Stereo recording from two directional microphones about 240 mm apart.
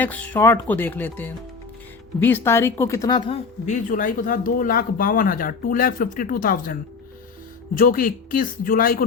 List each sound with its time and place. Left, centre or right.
0.0 s speech: centre
3.7 s speech: left
7.8 s speech: left